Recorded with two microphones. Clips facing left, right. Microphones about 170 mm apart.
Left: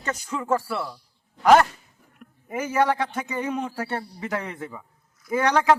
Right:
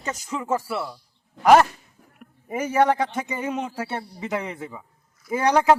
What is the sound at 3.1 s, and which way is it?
A man's voice, 15° right (ahead or behind).